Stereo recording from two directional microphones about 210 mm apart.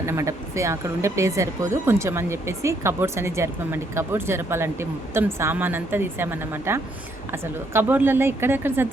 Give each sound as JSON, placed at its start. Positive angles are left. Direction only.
{"t": 0.0, "sound": "a woman's voice", "side_deg": -15}